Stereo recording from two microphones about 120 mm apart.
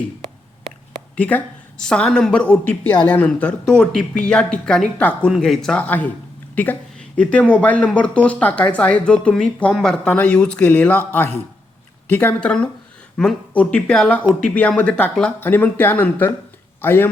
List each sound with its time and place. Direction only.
1.1 s speech: 10° left (ahead or behind)